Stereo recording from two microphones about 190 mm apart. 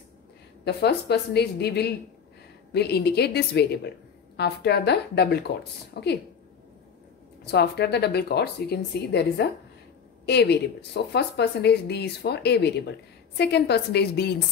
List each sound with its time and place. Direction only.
0.7 s speech: 60° left (ahead or behind)
7.5 s speech: 60° left (ahead or behind)